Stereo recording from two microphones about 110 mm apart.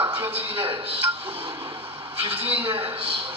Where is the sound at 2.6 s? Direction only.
55° right (ahead or behind).